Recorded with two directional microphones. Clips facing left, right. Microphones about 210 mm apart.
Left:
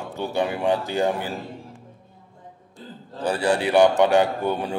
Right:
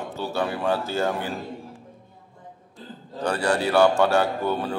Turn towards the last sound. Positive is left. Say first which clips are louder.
# left 1 dB
turn(degrees=15)  # may be behind; listen again after turning